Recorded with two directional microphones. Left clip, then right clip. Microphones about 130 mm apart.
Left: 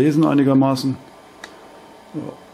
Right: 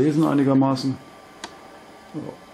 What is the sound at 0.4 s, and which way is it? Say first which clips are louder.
Speech: left 3 dB; 25° left (ahead or behind).